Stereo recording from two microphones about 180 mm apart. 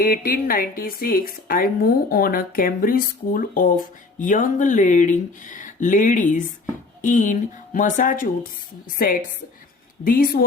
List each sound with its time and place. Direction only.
0.0 s speech: 55° left (ahead or behind)